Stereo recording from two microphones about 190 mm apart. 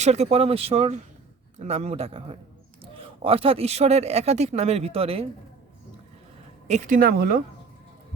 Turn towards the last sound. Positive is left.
turn(degrees=-50)  # may be behind; listen again after turning